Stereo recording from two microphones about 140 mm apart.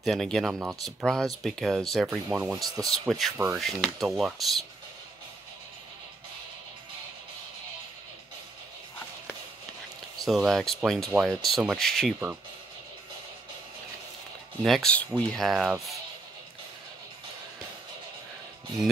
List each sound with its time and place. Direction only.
0.0 s speech: centre (ahead or behind)
2.2 s speech: 10° right (ahead or behind)
2.5 s speech: 25° right (ahead or behind)
3.1 s speech: centre (ahead or behind)
10.2 s speech: centre (ahead or behind)
14.6 s speech: 5° left (ahead or behind)
15.4 s speech: centre (ahead or behind)